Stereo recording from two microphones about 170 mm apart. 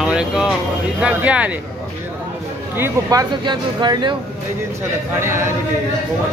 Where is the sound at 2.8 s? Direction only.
20° right (ahead or behind).